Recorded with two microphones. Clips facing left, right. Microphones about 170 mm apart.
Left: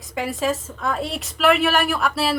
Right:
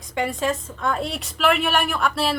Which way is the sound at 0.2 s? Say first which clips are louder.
Even; centre (ahead or behind).